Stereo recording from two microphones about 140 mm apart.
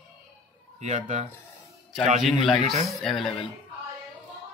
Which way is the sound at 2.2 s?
Centre (ahead or behind).